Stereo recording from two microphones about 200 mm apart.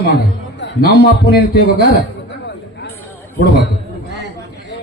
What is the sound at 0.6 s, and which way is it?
Speech, 55° left (ahead or behind).